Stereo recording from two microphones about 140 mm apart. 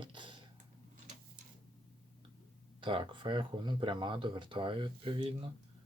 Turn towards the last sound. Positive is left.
turn(degrees=-35)  # may be behind; listen again after turning